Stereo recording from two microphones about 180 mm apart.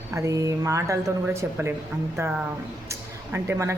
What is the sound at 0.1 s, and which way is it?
Speech, 15° right (ahead or behind).